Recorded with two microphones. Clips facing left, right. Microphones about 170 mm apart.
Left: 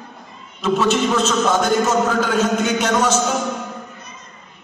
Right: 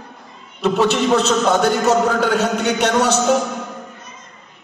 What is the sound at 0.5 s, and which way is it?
A man's voice, 65° right (ahead or behind).